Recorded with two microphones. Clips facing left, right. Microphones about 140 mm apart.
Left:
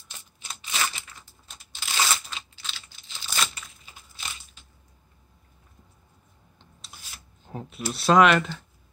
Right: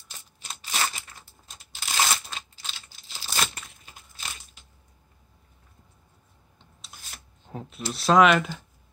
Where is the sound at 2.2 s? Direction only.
40° right (ahead or behind).